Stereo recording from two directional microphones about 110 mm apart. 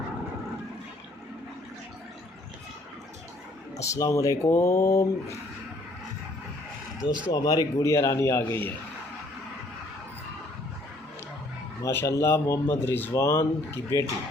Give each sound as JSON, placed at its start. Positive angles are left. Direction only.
{"t": 3.8, "sound": "speech", "side_deg": 30}
{"t": 7.3, "sound": "speech", "side_deg": 35}
{"t": 11.8, "sound": "speech", "side_deg": 25}